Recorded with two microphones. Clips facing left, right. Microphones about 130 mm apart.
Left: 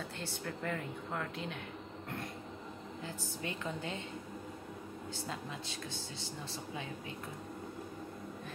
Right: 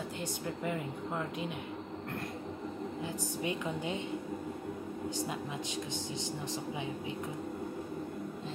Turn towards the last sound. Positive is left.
turn(degrees=-20)  # may be behind; listen again after turning